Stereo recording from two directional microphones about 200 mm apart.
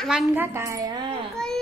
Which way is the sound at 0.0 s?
Centre (ahead or behind).